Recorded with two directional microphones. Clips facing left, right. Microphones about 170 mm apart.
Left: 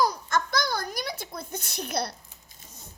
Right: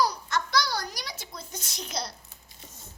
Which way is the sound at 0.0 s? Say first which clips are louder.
Left 2 dB; 50° left (ahead or behind).